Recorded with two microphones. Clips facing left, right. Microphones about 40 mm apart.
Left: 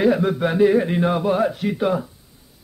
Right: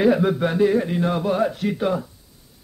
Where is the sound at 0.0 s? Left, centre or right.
Centre.